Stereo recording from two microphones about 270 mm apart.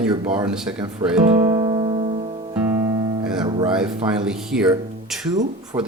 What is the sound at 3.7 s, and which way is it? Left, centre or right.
A man's voice, centre.